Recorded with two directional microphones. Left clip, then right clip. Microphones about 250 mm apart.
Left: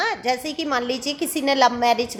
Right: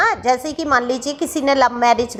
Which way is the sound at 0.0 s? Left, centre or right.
Centre.